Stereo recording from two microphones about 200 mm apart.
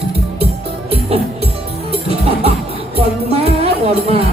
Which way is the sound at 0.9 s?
30° right (ahead or behind).